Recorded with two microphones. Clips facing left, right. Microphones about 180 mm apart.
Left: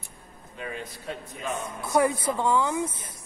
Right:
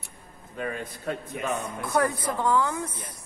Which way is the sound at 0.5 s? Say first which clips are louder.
Right 4 dB; 50° right (ahead or behind).